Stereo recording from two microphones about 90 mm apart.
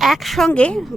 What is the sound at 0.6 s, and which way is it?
Speech, 15° left (ahead or behind).